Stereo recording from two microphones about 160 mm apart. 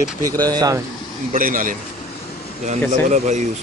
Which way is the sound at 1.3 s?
60° right (ahead or behind).